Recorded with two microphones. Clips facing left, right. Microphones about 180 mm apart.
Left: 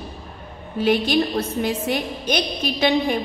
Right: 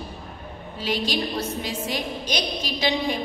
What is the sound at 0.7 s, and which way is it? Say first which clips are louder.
A woman's voice: left 8 dB; 55° left (ahead or behind).